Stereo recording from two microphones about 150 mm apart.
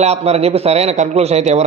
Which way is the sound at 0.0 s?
45° right (ahead or behind).